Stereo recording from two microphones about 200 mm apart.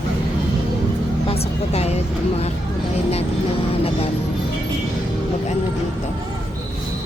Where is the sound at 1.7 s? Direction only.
30° left (ahead or behind).